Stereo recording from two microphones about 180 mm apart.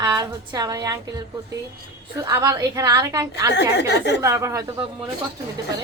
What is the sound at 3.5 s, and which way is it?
Speech, 70° left (ahead or behind).